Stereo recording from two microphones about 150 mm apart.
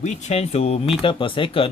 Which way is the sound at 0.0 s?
50° left (ahead or behind).